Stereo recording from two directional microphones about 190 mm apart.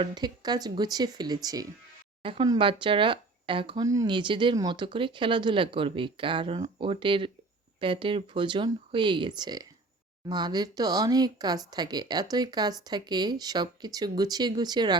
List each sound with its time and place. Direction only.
0.0 s speech: 20° right (ahead or behind)